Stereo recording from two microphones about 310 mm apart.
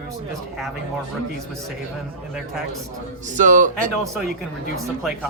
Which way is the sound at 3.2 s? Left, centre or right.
Right.